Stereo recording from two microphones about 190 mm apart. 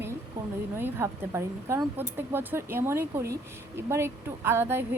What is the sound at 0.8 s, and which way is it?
Speech, 10° right (ahead or behind).